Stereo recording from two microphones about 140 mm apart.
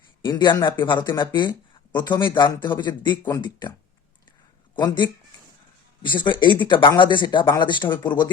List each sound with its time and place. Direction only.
0.2 s speech: 35° left (ahead or behind)
4.7 s speech: 30° left (ahead or behind)